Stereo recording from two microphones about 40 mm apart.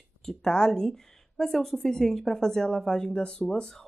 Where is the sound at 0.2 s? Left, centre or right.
Centre.